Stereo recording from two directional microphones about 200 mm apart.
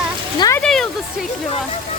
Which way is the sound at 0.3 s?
15° left (ahead or behind).